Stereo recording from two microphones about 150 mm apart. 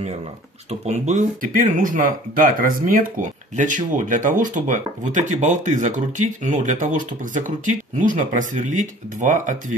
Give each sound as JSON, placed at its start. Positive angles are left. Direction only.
{"t": 0.7, "sound": "speech", "side_deg": -50}